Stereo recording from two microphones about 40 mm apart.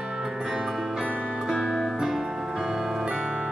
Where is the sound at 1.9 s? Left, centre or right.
Centre.